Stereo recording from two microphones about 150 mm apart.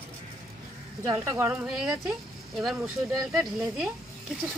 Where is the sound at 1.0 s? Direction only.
25° right (ahead or behind).